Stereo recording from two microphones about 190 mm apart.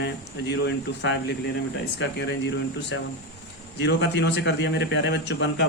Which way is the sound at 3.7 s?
60° left (ahead or behind).